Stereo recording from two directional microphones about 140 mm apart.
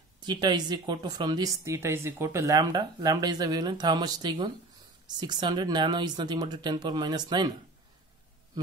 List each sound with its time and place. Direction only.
0.2 s speech: 30° right (ahead or behind)